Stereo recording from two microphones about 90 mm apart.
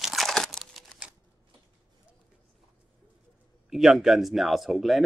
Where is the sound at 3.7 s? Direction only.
5° right (ahead or behind).